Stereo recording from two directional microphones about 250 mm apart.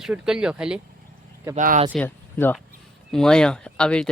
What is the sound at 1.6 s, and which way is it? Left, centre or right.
Speech, right.